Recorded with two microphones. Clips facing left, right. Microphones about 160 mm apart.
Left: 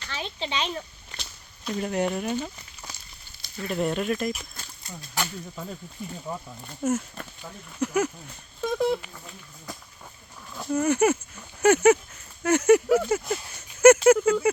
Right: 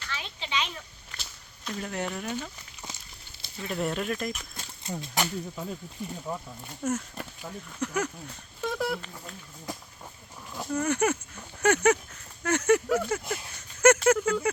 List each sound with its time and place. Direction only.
0.1 s a child's voice: 30° left (ahead or behind)
1.1 s walk: 5° right (ahead or behind)
1.8 s speech: 20° left (ahead or behind)
3.7 s speech: centre (ahead or behind)
4.5 s speech: 25° right (ahead or behind)
6.3 s speech: centre (ahead or behind)
6.8 s speech: 25° left (ahead or behind)
7.8 s speech: 10° left (ahead or behind)
8.6 s telephone dialing: 15° left (ahead or behind)
10.7 s speech: 5° left (ahead or behind)